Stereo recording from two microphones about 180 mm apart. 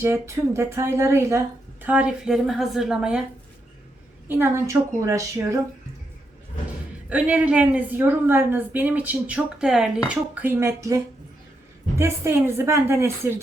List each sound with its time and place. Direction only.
0.0 s speech: 15° right (ahead or behind)
4.3 s speech: 15° right (ahead or behind)
7.1 s speech: 5° right (ahead or behind)